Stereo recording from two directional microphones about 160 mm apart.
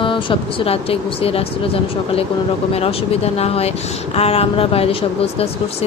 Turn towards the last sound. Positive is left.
turn(degrees=40)  # may be behind; listen again after turning